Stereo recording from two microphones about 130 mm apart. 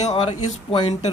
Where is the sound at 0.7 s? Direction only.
40° left (ahead or behind).